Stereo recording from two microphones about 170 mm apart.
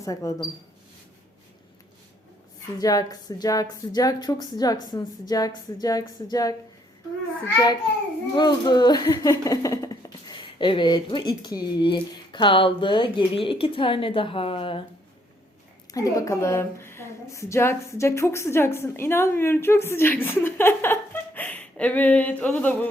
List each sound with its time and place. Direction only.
0.0 s speech: 20° left (ahead or behind)
2.7 s speech: 20° left (ahead or behind)
15.9 s a woman's voice: 20° left (ahead or behind)